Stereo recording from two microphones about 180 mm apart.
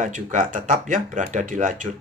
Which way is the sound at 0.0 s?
45° right (ahead or behind).